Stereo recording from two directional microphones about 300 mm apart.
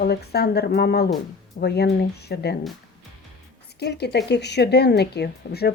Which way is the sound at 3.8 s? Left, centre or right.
Left.